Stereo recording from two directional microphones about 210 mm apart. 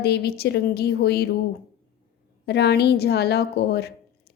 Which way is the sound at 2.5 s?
50° left (ahead or behind).